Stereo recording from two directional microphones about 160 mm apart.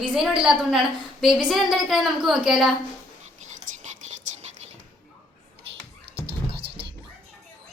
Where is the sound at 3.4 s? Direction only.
50° right (ahead or behind).